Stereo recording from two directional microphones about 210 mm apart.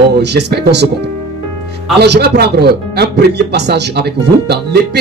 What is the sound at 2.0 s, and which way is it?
Speech, 50° right (ahead or behind).